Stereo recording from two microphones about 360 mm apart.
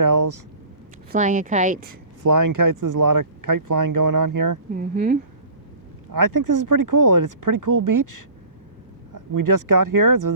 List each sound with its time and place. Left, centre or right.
0.0 s a sound: right
1.1 s speech: right
2.2 s speech: right
4.7 s speech: right
6.1 s speech: right